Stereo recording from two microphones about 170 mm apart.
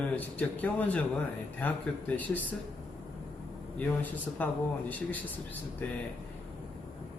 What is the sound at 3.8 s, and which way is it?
Speech, 10° left (ahead or behind).